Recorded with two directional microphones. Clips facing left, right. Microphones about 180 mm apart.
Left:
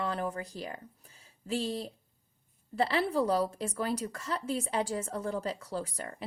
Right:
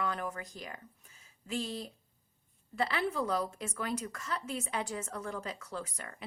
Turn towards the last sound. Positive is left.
turn(degrees=35)  # may be behind; listen again after turning